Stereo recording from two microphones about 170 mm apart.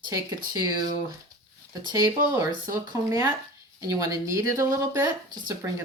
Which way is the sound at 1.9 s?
15° right (ahead or behind).